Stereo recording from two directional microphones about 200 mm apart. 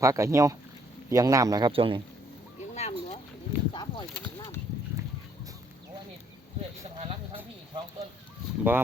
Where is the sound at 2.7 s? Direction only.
35° left (ahead or behind).